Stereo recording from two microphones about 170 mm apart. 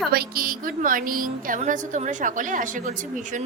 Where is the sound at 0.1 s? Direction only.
60° right (ahead or behind).